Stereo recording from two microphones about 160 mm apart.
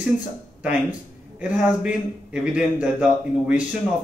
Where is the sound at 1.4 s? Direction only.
10° right (ahead or behind).